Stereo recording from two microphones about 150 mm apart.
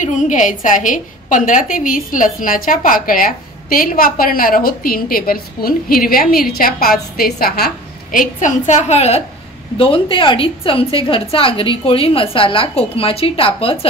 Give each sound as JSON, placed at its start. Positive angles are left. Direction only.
{"t": 0.0, "sound": "a woman's voice", "side_deg": 55}
{"t": 9.8, "sound": "a woman's voice", "side_deg": 35}